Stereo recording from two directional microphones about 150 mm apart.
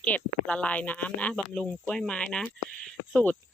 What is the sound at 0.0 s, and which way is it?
Speech, 10° left (ahead or behind).